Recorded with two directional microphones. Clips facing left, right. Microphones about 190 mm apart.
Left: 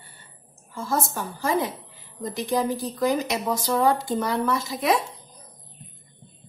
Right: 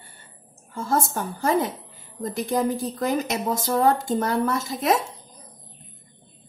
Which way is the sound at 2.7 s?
45° right (ahead or behind).